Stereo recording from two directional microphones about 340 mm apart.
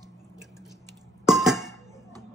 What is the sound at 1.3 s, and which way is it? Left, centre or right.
Music, centre.